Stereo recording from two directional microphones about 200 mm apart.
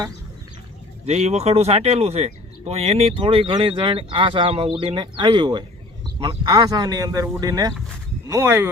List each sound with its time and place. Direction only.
1.0 s speech: 35° right (ahead or behind); by 8.7 s 10° right (ahead or behind)